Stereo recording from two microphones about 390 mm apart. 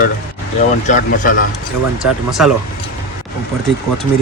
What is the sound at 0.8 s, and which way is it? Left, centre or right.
Speech, centre.